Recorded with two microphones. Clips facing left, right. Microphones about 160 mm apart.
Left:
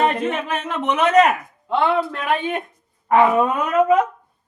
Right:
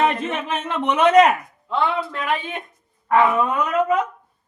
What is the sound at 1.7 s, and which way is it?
Speech, 60° left (ahead or behind).